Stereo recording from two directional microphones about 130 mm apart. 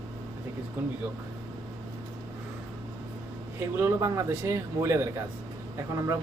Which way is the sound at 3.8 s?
25° right (ahead or behind).